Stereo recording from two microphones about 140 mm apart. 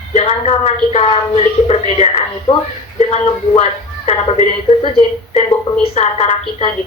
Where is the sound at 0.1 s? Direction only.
45° left (ahead or behind).